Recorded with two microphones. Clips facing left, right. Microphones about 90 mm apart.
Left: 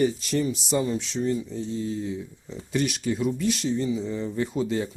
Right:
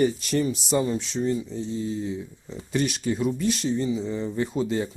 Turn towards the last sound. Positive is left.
turn(degrees=-30)  # may be behind; listen again after turning